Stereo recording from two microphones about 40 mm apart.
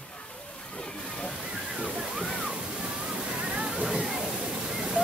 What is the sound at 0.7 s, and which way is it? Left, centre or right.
Slosh, left.